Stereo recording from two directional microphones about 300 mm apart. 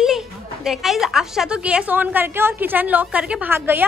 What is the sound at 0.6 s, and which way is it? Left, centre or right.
A woman's voice, centre.